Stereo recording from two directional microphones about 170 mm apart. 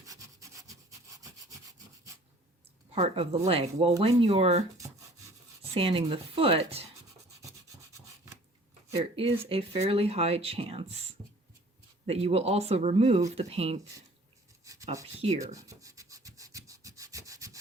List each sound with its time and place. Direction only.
0.0 s rub: 20° right (ahead or behind)
2.9 s speech: 40° right (ahead or behind)
5.7 s speech: 30° right (ahead or behind)
9.1 s speech: 35° right (ahead or behind)
12.0 s speech: 35° right (ahead or behind)
14.6 s writing: 20° right (ahead or behind)
15.2 s speech: 40° right (ahead or behind)
15.5 s rub: 20° right (ahead or behind)